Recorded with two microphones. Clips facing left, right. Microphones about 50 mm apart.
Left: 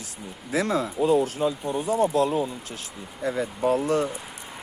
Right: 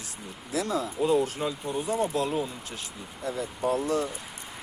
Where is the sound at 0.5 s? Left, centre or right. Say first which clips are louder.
Left 4 dB; left.